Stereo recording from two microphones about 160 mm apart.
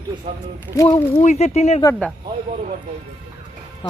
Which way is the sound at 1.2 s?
45° left (ahead or behind).